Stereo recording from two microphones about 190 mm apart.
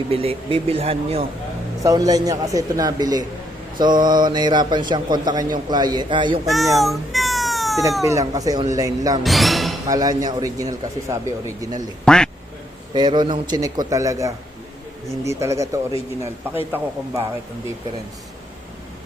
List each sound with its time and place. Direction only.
0.1 s speech: 30° right (ahead or behind)
1.8 s speech: 20° right (ahead or behind)
6.7 s cat: centre (ahead or behind)
8.0 s speech: 15° right (ahead or behind)
9.2 s a sound: centre (ahead or behind)
9.8 s speech: 20° right (ahead or behind)
12.0 s speech: 5° left (ahead or behind)
12.9 s speech: 25° right (ahead or behind)